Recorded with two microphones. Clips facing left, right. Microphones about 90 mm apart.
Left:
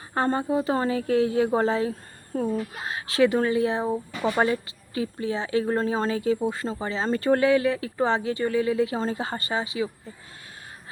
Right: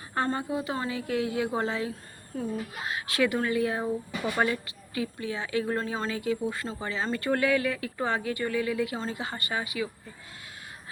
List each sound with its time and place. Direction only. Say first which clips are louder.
0.1 s speech: left 5 dB; 30° left (ahead or behind)